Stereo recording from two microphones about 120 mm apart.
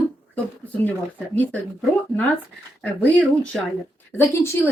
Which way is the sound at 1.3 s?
15° left (ahead or behind).